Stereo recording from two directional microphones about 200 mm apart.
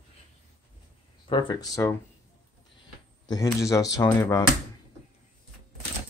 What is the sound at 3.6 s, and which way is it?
Speech, 15° left (ahead or behind).